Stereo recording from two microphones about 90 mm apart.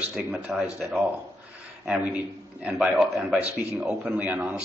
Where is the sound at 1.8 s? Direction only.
15° right (ahead or behind).